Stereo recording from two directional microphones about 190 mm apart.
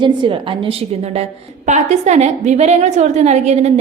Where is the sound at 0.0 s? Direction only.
25° right (ahead or behind).